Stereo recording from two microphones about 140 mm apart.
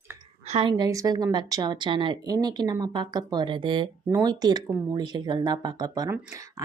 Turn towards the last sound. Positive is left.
turn(degrees=-25)  # may be behind; listen again after turning